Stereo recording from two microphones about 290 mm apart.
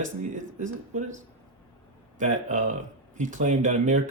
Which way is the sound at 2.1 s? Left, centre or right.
Right.